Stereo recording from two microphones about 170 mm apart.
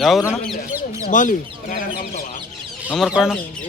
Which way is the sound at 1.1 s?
50° left (ahead or behind).